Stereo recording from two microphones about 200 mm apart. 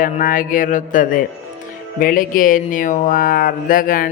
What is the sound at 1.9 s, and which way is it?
Speech, 45° left (ahead or behind).